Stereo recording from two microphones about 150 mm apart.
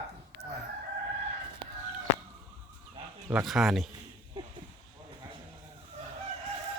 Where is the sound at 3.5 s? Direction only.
Centre (ahead or behind).